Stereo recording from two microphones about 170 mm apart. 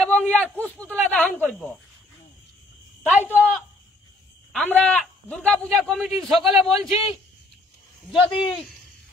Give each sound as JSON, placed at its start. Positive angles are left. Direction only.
{"t": 0.0, "sound": "a man's voice", "side_deg": 5}
{"t": 3.0, "sound": "speech", "side_deg": 5}
{"t": 4.5, "sound": "a man's voice", "side_deg": 5}
{"t": 8.3, "sound": "speech", "side_deg": 30}